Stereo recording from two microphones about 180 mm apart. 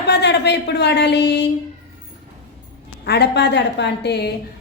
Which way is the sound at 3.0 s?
65° left (ahead or behind).